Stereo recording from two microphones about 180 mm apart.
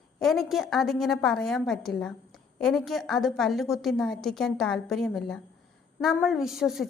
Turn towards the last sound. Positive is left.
turn(degrees=0)  # may be behind; listen again after turning